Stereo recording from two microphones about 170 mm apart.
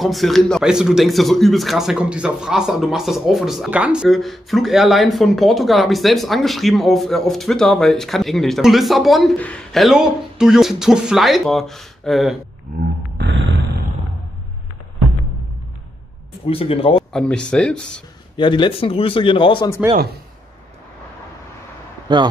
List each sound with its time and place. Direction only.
0.0 s a man's voice: centre (ahead or behind)
16.4 s speech: 35° left (ahead or behind)
17.1 s a man's voice: 5° left (ahead or behind)
18.3 s a man's voice: 30° left (ahead or behind)
22.1 s a man's voice: 25° right (ahead or behind)